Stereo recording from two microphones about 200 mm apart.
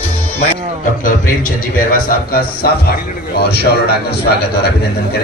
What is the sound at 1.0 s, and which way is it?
A man's voice, 45° left (ahead or behind).